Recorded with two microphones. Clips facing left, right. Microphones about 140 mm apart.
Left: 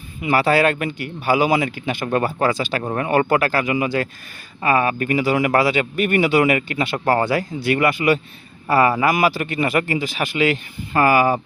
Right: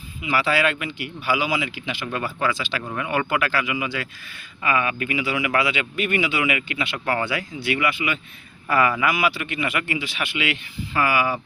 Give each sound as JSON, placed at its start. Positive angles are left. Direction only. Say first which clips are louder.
{"t": 0.2, "sound": "speech", "louder": "left 5 dB", "side_deg": 45}